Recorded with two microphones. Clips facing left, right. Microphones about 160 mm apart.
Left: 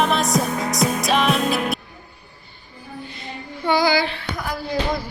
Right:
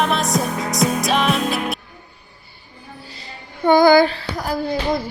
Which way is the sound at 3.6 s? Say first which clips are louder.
Right 7 dB; 50° right (ahead or behind).